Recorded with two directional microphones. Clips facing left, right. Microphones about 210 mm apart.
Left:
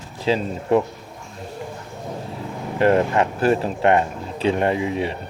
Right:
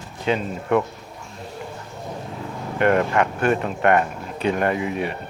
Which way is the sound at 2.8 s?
30° left (ahead or behind).